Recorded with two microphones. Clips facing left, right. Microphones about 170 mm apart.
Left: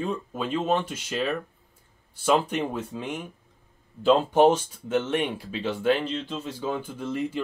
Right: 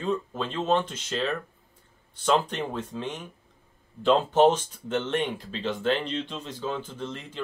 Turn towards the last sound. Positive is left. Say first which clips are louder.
# left 6 dB
turn(degrees=10)  # may be behind; listen again after turning